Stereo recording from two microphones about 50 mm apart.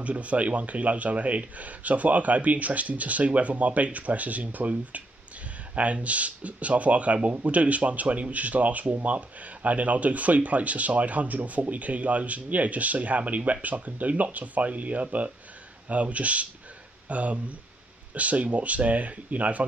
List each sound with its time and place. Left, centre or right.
0.0 s a man's voice: right